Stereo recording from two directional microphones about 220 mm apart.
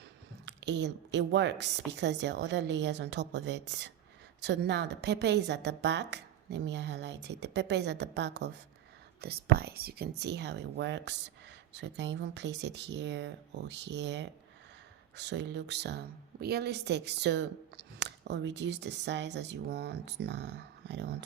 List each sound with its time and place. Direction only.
0.4 s a woman's voice: 55° right (ahead or behind)